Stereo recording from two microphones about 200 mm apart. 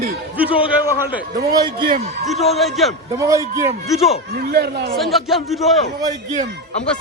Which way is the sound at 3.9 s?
Centre (ahead or behind).